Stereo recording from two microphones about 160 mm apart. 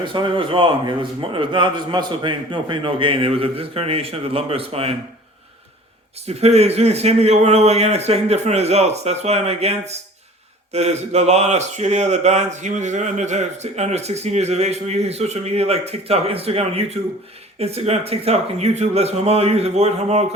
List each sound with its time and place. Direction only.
0.0 s a man's voice: 30° right (ahead or behind)
6.2 s a man's voice: 40° right (ahead or behind)